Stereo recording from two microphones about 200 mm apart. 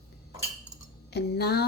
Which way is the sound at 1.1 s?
55° left (ahead or behind).